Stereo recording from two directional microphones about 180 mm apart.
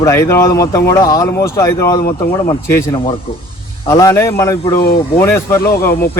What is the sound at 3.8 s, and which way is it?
Speech, 20° left (ahead or behind).